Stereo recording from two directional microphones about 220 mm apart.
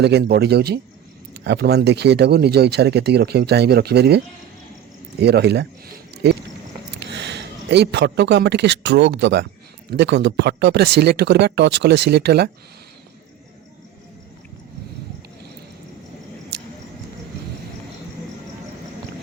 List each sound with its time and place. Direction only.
0.0 s speech: 50° right (ahead or behind)
7.0 s speech: 50° right (ahead or behind)